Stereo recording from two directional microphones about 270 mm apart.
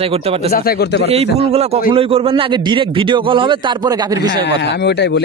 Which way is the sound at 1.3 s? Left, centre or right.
Right.